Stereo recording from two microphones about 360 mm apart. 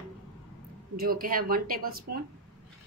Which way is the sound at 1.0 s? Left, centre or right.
Right.